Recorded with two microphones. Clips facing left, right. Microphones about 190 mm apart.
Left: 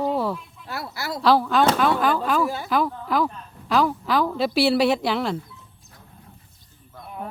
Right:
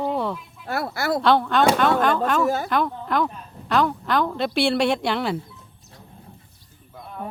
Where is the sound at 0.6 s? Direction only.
55° right (ahead or behind).